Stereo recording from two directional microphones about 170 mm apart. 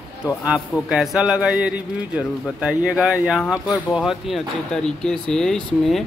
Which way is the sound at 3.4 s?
20° left (ahead or behind).